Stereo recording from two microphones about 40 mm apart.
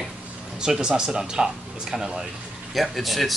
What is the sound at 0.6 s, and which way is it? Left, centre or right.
Speech, centre.